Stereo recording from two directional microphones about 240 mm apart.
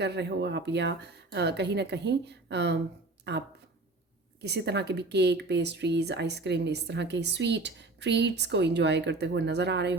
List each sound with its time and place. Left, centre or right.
0.0 s speech: right